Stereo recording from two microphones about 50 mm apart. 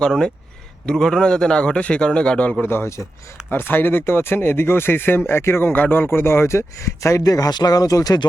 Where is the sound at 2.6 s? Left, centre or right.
Left.